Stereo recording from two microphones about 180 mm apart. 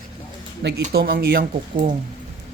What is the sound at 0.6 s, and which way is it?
Speech, 70° right (ahead or behind).